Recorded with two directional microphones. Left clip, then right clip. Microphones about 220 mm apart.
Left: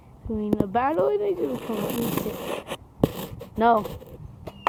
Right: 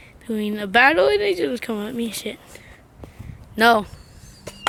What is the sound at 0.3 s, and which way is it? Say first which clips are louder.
Speech: right 1 dB; 20° right (ahead or behind).